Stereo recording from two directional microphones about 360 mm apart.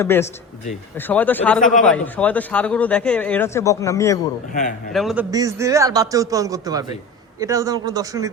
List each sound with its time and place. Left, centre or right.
0.0 s a man's voice: centre